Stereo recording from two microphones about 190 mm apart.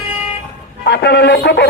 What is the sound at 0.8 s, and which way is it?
Speech, 60° left (ahead or behind).